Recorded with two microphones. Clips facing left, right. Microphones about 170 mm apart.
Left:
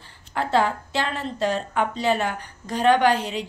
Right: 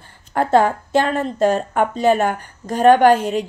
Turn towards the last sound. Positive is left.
turn(degrees=-50)  # may be behind; listen again after turning